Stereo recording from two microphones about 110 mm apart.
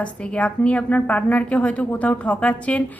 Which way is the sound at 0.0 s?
10° left (ahead or behind).